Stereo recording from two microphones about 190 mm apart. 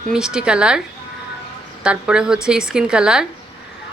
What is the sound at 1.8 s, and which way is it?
A woman's voice, 5° right (ahead or behind).